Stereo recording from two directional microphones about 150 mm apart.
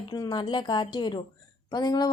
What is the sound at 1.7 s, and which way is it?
Speech, 30° left (ahead or behind).